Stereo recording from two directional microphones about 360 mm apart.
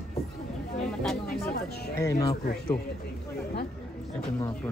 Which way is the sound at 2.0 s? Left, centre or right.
Centre.